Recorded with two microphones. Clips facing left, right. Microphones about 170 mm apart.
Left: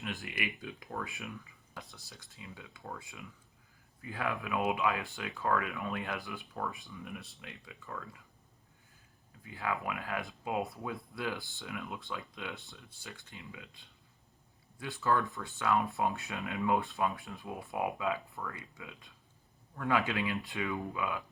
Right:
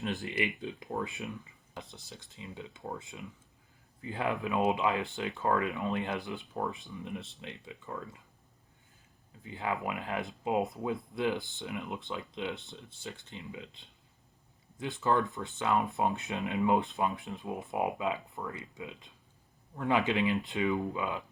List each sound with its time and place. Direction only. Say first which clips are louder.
0.2 s speech: right 6 dB; 25° right (ahead or behind)
9.4 s speech: right 2 dB; 25° right (ahead or behind)